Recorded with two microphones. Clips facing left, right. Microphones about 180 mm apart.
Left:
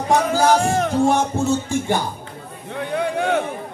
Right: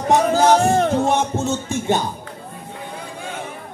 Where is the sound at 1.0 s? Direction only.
20° right (ahead or behind).